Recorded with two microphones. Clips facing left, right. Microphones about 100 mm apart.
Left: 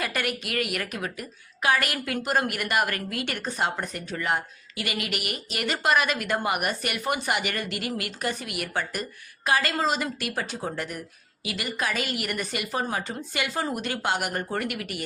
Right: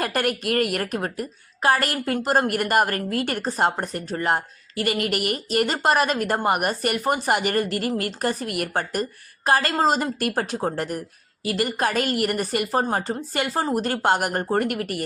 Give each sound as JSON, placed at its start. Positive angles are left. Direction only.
{"t": 0.0, "sound": "a woman's voice", "side_deg": -45}